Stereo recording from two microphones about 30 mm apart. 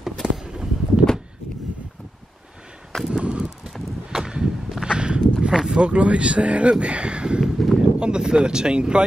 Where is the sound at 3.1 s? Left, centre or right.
Right.